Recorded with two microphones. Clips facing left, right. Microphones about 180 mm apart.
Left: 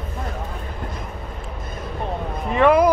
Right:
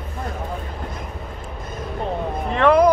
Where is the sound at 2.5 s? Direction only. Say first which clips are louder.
Even; 5° left (ahead or behind).